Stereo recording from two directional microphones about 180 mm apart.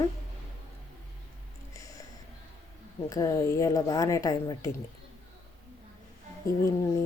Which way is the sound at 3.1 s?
20° left (ahead or behind).